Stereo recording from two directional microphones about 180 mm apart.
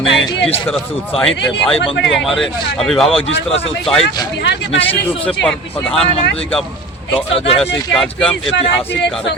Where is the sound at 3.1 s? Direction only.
30° left (ahead or behind).